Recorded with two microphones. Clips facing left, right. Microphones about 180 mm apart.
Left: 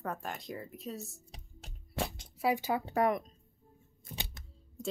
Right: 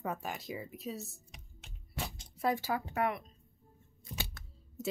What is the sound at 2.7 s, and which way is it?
Speech, 30° left (ahead or behind).